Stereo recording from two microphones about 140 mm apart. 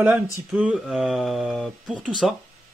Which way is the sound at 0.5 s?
5° right (ahead or behind).